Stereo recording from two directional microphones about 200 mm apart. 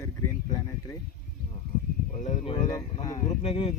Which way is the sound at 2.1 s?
35° left (ahead or behind).